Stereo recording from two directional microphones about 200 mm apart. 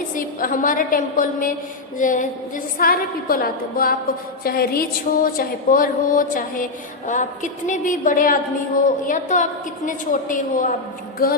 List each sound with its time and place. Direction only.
0.1 s a woman's voice: 45° left (ahead or behind)